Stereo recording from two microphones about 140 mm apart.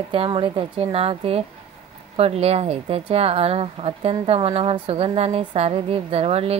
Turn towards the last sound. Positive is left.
turn(degrees=-45)  # may be behind; listen again after turning